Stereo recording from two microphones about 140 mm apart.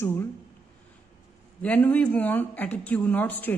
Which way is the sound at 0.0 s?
20° left (ahead or behind).